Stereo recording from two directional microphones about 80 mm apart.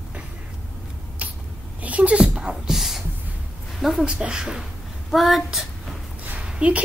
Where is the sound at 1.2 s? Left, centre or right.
Centre.